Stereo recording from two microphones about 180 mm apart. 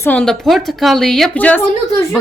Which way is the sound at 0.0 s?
5° left (ahead or behind).